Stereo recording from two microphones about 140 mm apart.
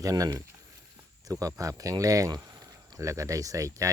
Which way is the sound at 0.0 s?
25° right (ahead or behind).